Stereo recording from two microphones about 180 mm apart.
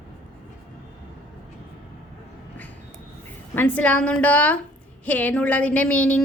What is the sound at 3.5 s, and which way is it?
A woman's voice, 10° left (ahead or behind).